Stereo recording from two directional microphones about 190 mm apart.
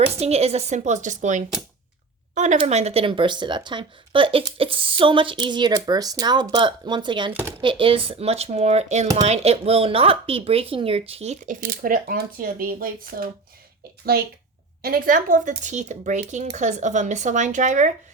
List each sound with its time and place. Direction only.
0.2 s a woman's voice: 35° right (ahead or behind)